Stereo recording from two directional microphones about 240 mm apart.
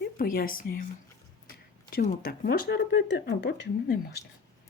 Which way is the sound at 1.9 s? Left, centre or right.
Left.